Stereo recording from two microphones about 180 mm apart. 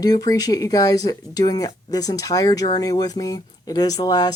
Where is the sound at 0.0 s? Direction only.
20° left (ahead or behind).